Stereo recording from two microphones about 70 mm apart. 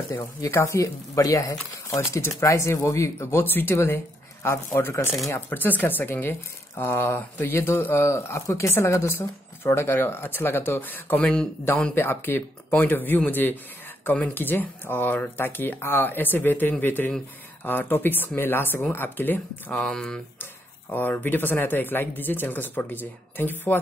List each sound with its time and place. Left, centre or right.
0.1 s speech: left
19.8 s speech: centre
20.9 s speech: left